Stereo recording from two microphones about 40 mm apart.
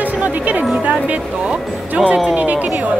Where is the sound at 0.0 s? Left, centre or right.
Right.